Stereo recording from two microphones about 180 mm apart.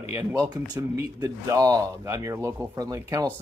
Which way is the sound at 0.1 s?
15° right (ahead or behind).